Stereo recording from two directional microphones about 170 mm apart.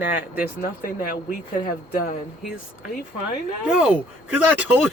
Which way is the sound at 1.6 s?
55° left (ahead or behind).